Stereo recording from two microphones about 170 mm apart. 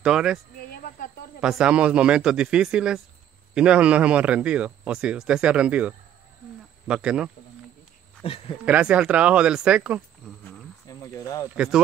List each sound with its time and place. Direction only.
0.0 s speech: 5° right (ahead or behind)
0.6 s cricket: 60° left (ahead or behind)
1.4 s speech: 5° right (ahead or behind)
8.2 s speech: 35° left (ahead or behind)
8.6 s speech: 10° right (ahead or behind)
10.9 s speech: 20° left (ahead or behind)
11.5 s speech: 5° right (ahead or behind)